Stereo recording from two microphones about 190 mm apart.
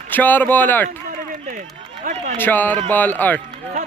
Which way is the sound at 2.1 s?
40° right (ahead or behind).